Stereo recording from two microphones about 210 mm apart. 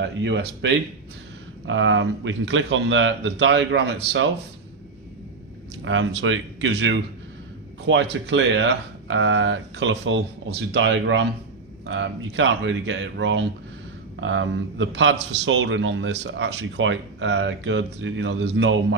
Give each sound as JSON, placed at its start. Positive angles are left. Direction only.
{"t": 0.0, "sound": "a man's voice", "side_deg": -55}
{"t": 5.9, "sound": "a man's voice", "side_deg": -65}